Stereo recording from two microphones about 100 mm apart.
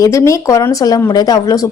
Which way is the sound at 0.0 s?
30° left (ahead or behind).